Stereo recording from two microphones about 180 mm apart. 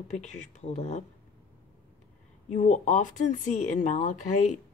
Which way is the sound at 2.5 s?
40° left (ahead or behind).